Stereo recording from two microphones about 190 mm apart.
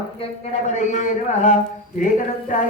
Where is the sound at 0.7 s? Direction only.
40° left (ahead or behind).